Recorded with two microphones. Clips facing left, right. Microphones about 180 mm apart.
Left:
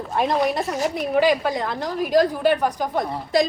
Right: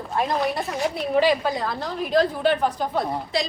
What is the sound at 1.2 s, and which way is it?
A woman's voice, 15° left (ahead or behind).